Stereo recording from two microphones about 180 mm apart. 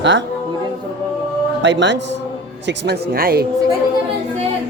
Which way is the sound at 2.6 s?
65° right (ahead or behind).